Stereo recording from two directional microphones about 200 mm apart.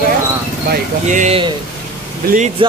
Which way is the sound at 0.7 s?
40° right (ahead or behind).